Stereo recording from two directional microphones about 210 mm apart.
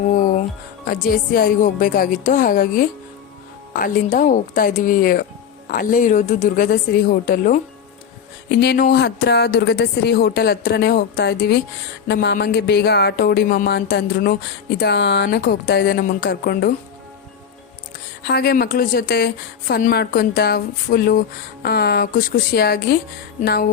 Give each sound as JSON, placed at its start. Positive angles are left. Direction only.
{"t": 0.9, "sound": "a woman's voice", "side_deg": 45}
{"t": 18.2, "sound": "a woman's voice", "side_deg": 50}